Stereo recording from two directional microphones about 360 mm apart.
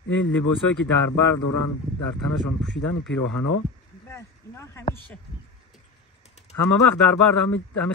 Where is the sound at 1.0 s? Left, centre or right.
Left.